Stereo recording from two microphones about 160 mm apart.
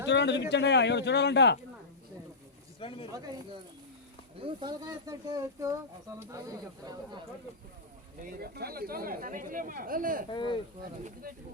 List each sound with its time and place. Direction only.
0.0 s speech: 90° left
2.8 s speech: 35° left (ahead or behind)
3.1 s speech: 25° right (ahead or behind)
8.2 s speech: 65° right (ahead or behind)
10.2 s speech: 30° left (ahead or behind)
11.0 s speech: 65° right (ahead or behind)